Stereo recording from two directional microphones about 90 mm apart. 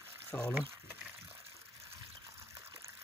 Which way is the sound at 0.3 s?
15° left (ahead or behind).